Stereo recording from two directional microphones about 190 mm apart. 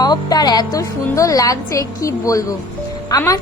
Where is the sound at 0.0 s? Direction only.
20° left (ahead or behind).